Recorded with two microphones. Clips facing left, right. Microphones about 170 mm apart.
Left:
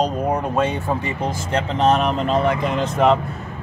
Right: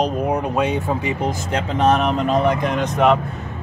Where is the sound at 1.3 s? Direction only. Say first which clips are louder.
Even; 10° right (ahead or behind).